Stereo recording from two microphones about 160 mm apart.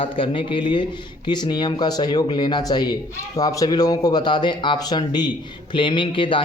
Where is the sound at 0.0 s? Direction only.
35° left (ahead or behind).